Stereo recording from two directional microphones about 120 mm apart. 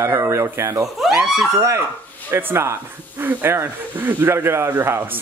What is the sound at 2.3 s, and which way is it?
Speech, 20° right (ahead or behind).